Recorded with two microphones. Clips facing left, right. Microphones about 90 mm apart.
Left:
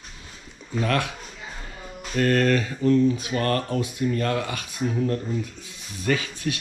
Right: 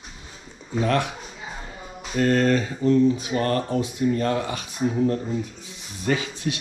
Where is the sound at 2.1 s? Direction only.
60° left (ahead or behind).